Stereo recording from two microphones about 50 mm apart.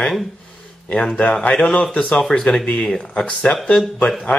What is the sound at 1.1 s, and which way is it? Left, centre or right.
Speech, left.